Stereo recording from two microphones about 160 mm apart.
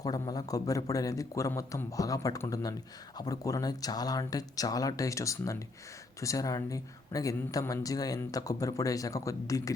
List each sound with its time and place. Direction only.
0.0 s speech: 25° left (ahead or behind)